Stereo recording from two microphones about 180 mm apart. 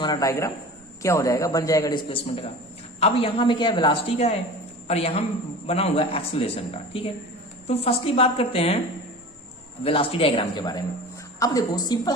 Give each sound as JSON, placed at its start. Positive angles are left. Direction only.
{"t": 0.0, "sound": "a man's voice", "side_deg": 20}
{"t": 9.8, "sound": "a woman's voice", "side_deg": 30}